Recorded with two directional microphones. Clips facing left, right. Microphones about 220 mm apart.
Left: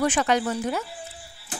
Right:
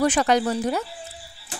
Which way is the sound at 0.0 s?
40° right (ahead or behind).